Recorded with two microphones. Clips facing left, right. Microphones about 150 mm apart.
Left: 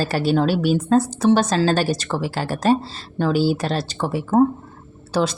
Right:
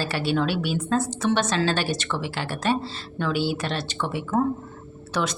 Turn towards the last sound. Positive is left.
turn(degrees=30)  # may be behind; listen again after turning